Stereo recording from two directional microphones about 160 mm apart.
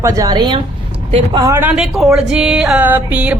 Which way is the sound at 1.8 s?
Centre (ahead or behind).